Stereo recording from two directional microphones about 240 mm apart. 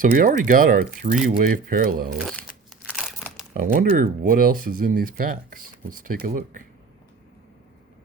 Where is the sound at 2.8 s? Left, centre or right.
Centre.